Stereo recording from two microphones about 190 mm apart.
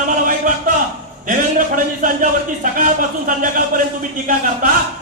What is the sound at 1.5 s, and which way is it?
Speech, 45° right (ahead or behind).